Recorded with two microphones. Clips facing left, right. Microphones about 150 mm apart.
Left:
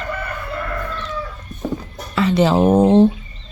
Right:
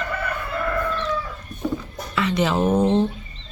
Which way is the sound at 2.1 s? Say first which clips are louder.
Left 6 dB; 35° left (ahead or behind).